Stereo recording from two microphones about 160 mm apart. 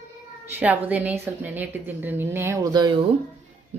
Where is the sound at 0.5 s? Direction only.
10° right (ahead or behind); by 3.0 s 25° right (ahead or behind).